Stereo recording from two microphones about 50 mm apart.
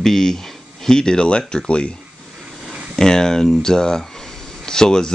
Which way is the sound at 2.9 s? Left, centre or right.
Centre.